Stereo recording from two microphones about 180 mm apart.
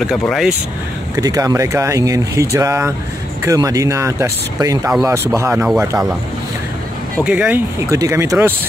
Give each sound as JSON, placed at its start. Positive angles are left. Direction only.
{"t": 0.3, "sound": "speech", "side_deg": 0}
{"t": 1.1, "sound": "speech", "side_deg": -20}
{"t": 7.2, "sound": "speech", "side_deg": -10}